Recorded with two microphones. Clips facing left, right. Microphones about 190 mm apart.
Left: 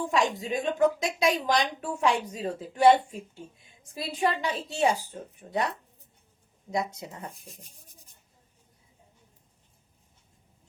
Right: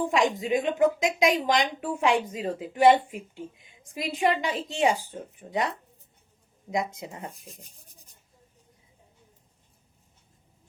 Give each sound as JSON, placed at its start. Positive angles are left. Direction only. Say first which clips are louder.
{"t": 0.0, "sound": "a woman's voice", "louder": "right 2 dB", "side_deg": -15}
{"t": 6.7, "sound": "speech", "louder": "right 1 dB", "side_deg": -20}